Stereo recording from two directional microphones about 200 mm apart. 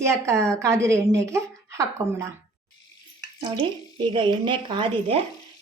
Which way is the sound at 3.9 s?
25° right (ahead or behind).